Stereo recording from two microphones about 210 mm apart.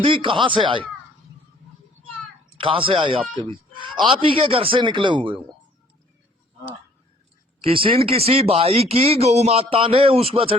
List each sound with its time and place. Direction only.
0.0 s speech: 25° right (ahead or behind)
2.6 s speech: 25° right (ahead or behind)
7.6 s speech: 25° right (ahead or behind)